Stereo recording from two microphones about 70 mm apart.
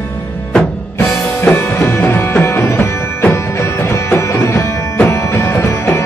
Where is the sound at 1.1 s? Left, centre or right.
Left.